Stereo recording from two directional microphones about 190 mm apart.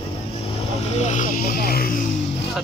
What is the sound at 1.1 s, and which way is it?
Speech, 45° left (ahead or behind).